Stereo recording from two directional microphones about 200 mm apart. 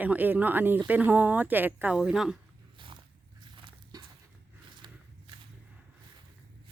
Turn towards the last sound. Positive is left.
turn(degrees=-25)  # may be behind; listen again after turning